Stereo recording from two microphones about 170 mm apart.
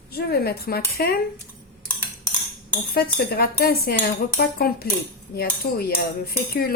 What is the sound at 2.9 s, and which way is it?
Cutlery, 65° left (ahead or behind).